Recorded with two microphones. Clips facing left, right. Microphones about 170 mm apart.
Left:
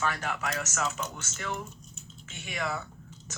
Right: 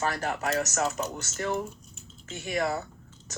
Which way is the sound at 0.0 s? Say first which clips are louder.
Right 3 dB; 40° right (ahead or behind).